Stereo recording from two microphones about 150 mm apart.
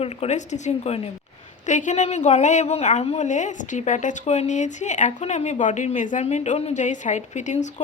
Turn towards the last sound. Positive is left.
turn(degrees=55)  # may be behind; listen again after turning